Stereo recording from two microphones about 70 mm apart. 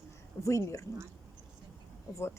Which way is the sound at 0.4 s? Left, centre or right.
Left.